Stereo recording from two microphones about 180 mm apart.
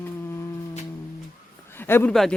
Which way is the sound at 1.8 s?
10° left (ahead or behind).